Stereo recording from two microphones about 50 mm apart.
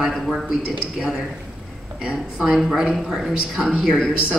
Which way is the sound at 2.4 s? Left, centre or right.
Centre.